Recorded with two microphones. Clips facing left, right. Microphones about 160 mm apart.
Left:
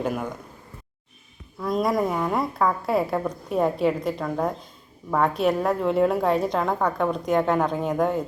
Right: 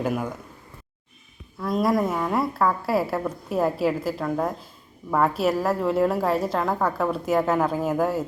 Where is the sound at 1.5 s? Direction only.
Centre (ahead or behind).